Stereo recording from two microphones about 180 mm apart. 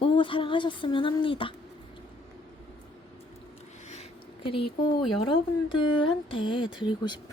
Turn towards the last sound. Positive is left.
turn(degrees=25)  # may be behind; listen again after turning